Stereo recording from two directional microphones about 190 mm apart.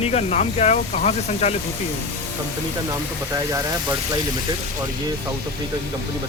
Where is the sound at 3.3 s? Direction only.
15° right (ahead or behind).